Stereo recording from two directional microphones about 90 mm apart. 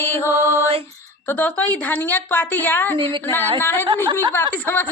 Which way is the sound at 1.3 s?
15° left (ahead or behind).